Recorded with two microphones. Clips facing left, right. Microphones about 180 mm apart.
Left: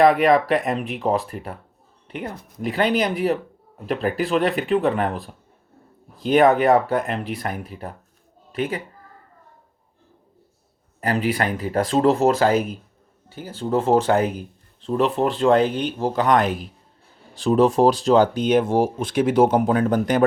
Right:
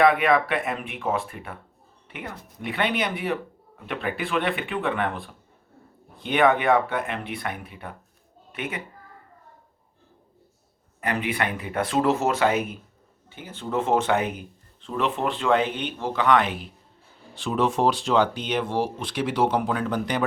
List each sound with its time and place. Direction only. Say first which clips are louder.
0.0 s a woman's voice: left 4 dB; 40° left (ahead or behind)
11.0 s speech: left 5 dB; 35° left (ahead or behind)